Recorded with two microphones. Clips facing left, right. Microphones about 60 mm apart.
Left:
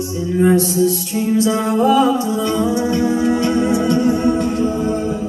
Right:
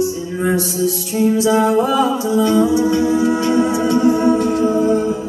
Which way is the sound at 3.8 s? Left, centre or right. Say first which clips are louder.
Right 1 dB; centre.